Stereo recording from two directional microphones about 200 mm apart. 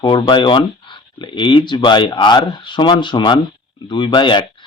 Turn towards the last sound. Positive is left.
turn(degrees=25)  # may be behind; listen again after turning